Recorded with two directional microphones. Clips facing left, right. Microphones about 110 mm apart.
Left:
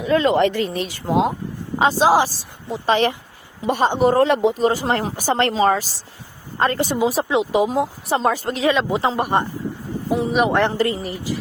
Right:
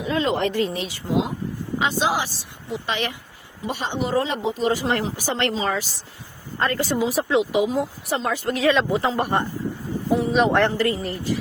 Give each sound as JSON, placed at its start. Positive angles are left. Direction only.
{"t": 0.0, "sound": "speech", "side_deg": 60}
{"t": 0.7, "sound": "speech", "side_deg": 50}
{"t": 1.8, "sound": "speech", "side_deg": 35}
{"t": 3.7, "sound": "speech", "side_deg": 50}
{"t": 4.2, "sound": "speech", "side_deg": 65}
{"t": 4.6, "sound": "speech", "side_deg": 35}
{"t": 5.0, "sound": "speech", "side_deg": 45}
{"t": 6.6, "sound": "speech", "side_deg": 25}
{"t": 8.9, "sound": "speech", "side_deg": 20}
{"t": 10.7, "sound": "speech", "side_deg": 25}
{"t": 11.0, "sound": "speech", "side_deg": 10}